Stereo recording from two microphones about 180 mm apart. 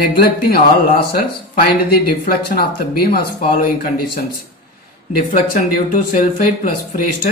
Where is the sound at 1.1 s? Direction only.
60° left (ahead or behind).